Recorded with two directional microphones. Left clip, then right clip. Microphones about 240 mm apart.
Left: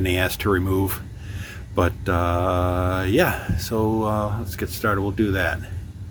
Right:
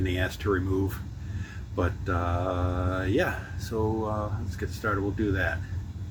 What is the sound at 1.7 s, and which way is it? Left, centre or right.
Speech, left.